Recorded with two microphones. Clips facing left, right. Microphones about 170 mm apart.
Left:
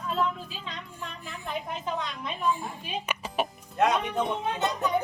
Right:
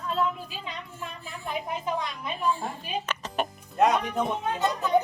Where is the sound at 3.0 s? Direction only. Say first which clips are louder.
Left 3 dB; 10° left (ahead or behind).